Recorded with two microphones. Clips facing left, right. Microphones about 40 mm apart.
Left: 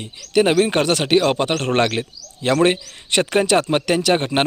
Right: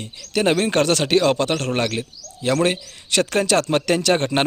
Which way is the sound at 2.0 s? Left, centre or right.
Left.